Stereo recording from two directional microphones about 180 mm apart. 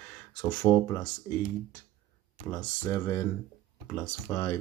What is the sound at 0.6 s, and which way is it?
Speech, 10° left (ahead or behind).